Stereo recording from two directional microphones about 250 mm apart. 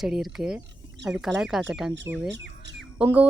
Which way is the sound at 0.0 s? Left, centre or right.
Centre.